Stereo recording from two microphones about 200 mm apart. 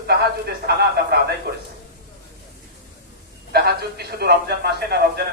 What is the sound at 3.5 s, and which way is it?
A man's voice, 50° right (ahead or behind).